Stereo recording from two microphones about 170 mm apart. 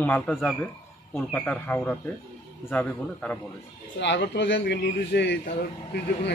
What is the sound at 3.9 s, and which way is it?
Speech, 90° left.